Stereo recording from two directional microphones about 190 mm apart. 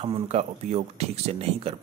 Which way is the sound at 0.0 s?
35° right (ahead or behind).